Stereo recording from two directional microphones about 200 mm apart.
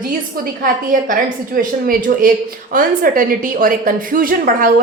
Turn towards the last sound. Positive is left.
turn(degrees=-45)  # may be behind; listen again after turning